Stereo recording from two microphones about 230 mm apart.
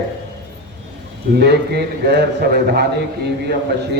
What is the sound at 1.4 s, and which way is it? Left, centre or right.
Speech, right.